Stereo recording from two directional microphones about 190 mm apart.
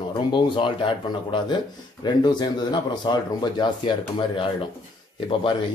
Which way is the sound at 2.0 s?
25° left (ahead or behind).